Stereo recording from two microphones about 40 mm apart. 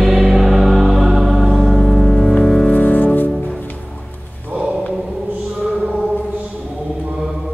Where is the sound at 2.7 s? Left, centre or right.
Left.